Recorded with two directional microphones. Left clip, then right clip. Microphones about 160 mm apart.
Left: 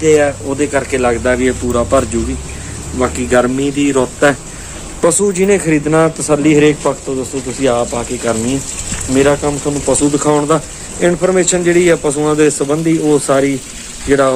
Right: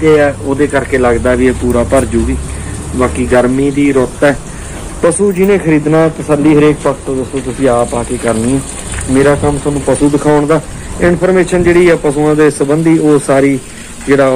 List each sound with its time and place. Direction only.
0.0 s a man's voice: 15° left (ahead or behind)